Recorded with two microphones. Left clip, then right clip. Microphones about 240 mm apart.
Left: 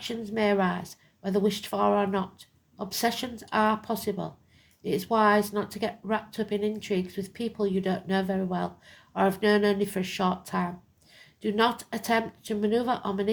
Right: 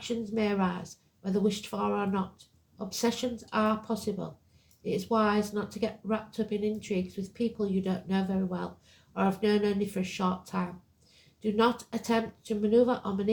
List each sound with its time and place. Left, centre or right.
0.0 s speech: left